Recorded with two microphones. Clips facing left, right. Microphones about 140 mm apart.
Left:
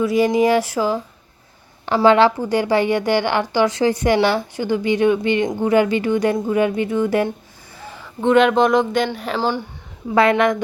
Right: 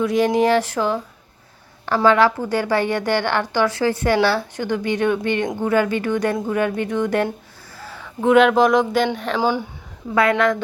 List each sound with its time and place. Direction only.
0.0 s a woman's voice: 5° left (ahead or behind)
2.0 s speech: 25° left (ahead or behind)
2.4 s a woman's voice: 15° left (ahead or behind)
8.0 s speech: 5° right (ahead or behind)
9.4 s speech: 10° right (ahead or behind)
10.2 s speech: 20° left (ahead or behind)